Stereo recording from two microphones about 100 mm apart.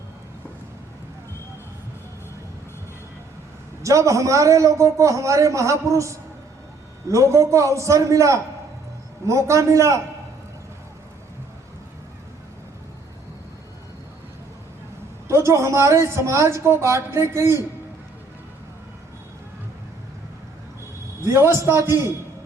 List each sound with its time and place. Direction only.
3.8 s a man's voice: 30° right (ahead or behind)
15.3 s speech: 30° right (ahead or behind)
21.2 s speech: 25° right (ahead or behind)